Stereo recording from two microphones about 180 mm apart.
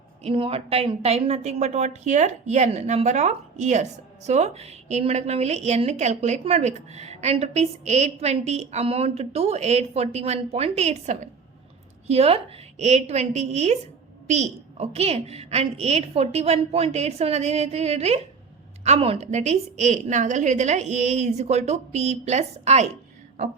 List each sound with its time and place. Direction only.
0.2 s a woman's voice: 30° right (ahead or behind)